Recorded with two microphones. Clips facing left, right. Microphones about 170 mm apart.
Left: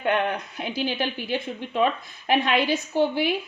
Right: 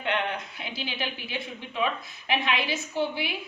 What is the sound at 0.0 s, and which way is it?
A woman's voice, 45° left (ahead or behind).